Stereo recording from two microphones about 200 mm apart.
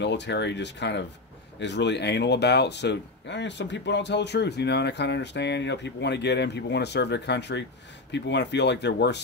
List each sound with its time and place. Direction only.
0.0 s speech: 60° left (ahead or behind)